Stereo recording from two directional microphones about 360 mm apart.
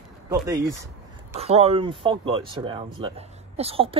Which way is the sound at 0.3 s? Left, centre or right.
Centre.